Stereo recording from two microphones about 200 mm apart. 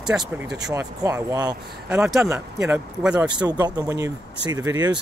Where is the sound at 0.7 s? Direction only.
15° right (ahead or behind).